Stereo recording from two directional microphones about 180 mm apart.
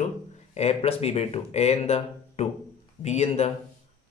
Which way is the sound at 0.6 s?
35° left (ahead or behind).